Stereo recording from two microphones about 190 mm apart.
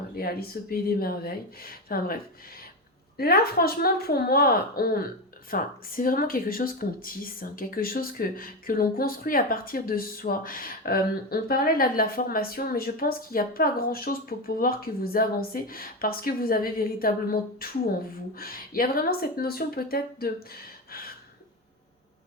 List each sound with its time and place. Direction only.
0.2 s speech: 55° left (ahead or behind)
3.2 s speech: 55° left (ahead or behind)